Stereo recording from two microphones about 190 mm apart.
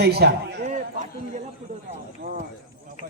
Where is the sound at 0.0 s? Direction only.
60° right (ahead or behind).